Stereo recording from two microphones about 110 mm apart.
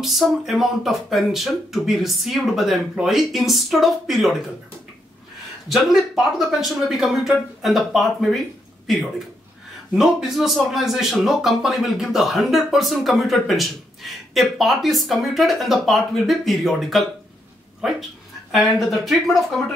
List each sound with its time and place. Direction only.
0.0 s speech: centre (ahead or behind)
5.7 s speech: centre (ahead or behind)
9.9 s speech: 5° right (ahead or behind)
18.5 s speech: centre (ahead or behind)